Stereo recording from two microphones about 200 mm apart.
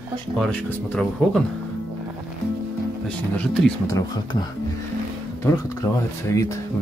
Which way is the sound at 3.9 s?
20° left (ahead or behind).